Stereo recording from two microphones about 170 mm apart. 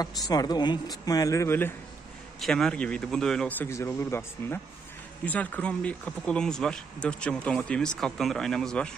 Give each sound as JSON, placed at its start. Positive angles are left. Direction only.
{"t": 0.0, "sound": "speech", "side_deg": 20}
{"t": 2.4, "sound": "speech", "side_deg": 5}